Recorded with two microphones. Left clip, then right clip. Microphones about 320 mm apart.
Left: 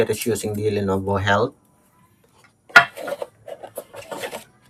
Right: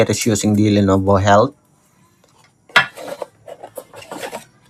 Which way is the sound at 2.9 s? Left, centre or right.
Centre.